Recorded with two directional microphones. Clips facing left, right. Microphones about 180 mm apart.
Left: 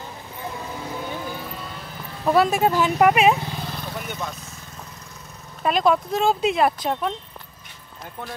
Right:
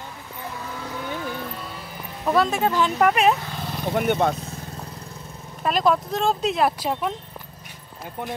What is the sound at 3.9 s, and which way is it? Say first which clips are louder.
Speech: right 11 dB; 60° right (ahead or behind).